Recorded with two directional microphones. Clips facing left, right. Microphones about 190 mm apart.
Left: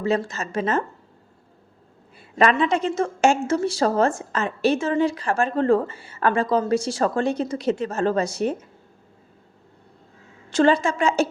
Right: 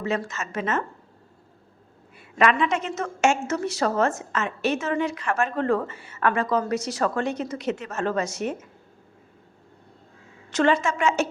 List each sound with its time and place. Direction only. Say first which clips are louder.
0.0 s a woman's voice: left 4 dB; 35° left (ahead or behind)
2.4 s a woman's voice: left 3 dB; 35° left (ahead or behind)
10.5 s a woman's voice: left 3 dB; 35° left (ahead or behind)